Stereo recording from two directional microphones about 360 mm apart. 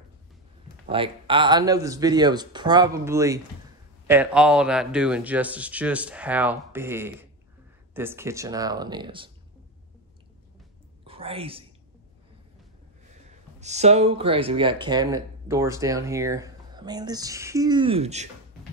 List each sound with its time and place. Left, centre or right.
0.8 s speech: centre
11.1 s a woman's voice: centre
13.3 s speech: centre